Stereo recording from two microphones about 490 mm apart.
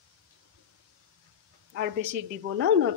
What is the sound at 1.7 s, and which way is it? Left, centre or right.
Speech, right.